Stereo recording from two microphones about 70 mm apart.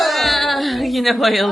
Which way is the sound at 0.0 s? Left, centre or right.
Centre.